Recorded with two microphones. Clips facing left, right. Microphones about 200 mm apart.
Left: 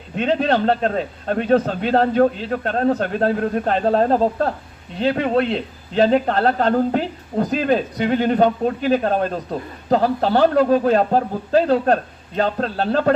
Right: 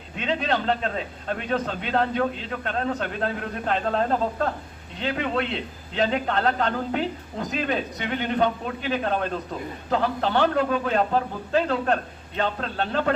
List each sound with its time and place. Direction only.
0.2 s a man's voice: 40° left (ahead or behind)